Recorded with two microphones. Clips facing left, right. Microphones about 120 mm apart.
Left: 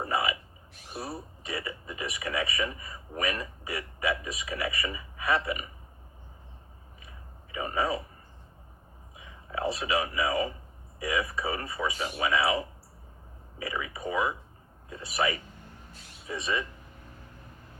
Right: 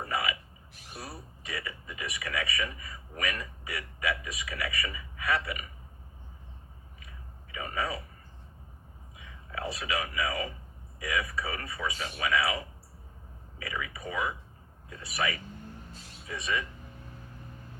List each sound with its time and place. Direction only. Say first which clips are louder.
0.0 s a sound: left 3 dB; 25° left (ahead or behind)
0.9 s speech: left 6 dB; 30° left (ahead or behind)
7.5 s speech: left 5 dB; 30° left (ahead or behind)
9.1 s a man's voice: left 4 dB; 25° left (ahead or behind)